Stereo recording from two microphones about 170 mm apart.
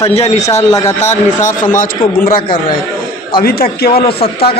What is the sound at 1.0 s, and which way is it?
A man's voice, 45° left (ahead or behind).